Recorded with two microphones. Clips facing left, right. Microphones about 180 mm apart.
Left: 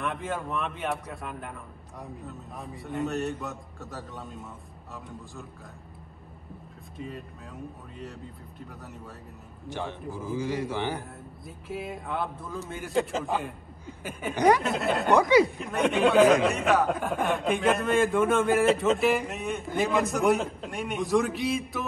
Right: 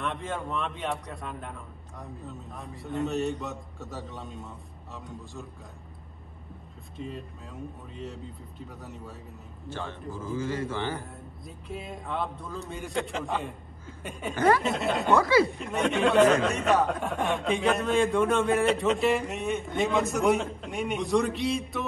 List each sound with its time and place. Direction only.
0.0 s a man's voice: centre (ahead or behind)
7.0 s a man's voice: centre (ahead or behind)
9.7 s a man's voice: 15° left (ahead or behind)
11.4 s a man's voice: centre (ahead or behind)
14.3 s a man's voice: 15° left (ahead or behind)
14.6 s a man's voice: centre (ahead or behind)
15.1 s a man's voice: 15° left (ahead or behind)
15.5 s a man's voice: centre (ahead or behind)